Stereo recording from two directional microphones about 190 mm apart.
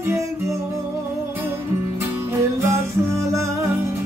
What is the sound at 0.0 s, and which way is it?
Music, 15° right (ahead or behind).